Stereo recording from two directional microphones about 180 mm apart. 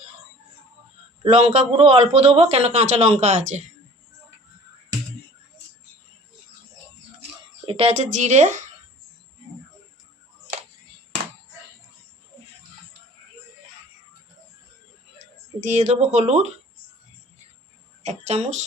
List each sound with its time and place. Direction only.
1.3 s a man's voice: 35° right (ahead or behind)
7.6 s a man's voice: 30° right (ahead or behind)
15.6 s a man's voice: 40° right (ahead or behind)
18.0 s a sound: 40° right (ahead or behind)